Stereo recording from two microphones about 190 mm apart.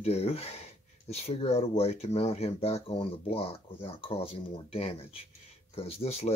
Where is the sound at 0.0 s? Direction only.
35° left (ahead or behind).